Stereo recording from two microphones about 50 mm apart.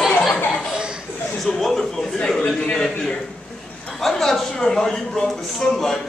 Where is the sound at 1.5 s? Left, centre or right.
Centre.